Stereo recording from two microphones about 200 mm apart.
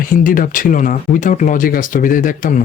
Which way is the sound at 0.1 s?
45° left (ahead or behind).